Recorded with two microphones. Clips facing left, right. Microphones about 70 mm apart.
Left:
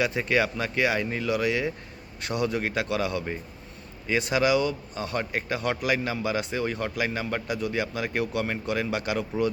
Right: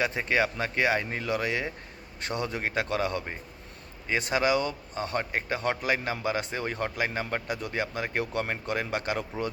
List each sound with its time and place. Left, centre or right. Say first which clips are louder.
0.0 s a man's voice: left 2 dB; right